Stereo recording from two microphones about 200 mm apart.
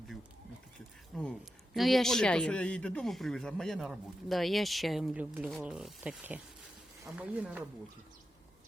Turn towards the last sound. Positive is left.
turn(degrees=-5)  # may be behind; listen again after turning